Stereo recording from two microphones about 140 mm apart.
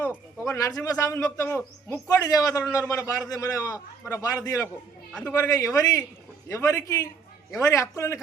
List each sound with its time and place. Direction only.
0.4 s a man's voice: 25° left (ahead or behind)